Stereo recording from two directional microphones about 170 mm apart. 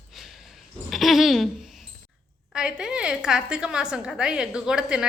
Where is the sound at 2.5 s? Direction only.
5° right (ahead or behind).